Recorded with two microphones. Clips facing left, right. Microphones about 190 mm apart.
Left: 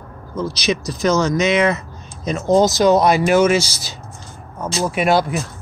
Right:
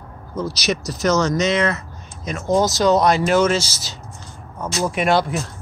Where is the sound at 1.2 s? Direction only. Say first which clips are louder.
Left 3 dB; 10° left (ahead or behind).